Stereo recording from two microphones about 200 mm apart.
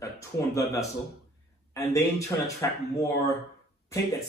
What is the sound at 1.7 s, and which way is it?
Speech, 15° left (ahead or behind).